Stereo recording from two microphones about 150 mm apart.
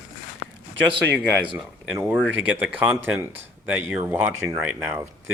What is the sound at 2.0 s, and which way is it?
Speech, 10° right (ahead or behind).